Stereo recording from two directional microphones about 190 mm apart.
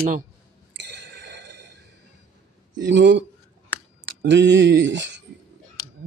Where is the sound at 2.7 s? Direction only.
70° right (ahead or behind).